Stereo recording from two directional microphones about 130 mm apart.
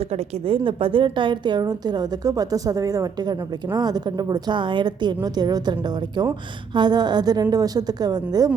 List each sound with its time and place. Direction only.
0.1 s a woman's voice: 45° right (ahead or behind)
6.7 s a woman's voice: 35° right (ahead or behind)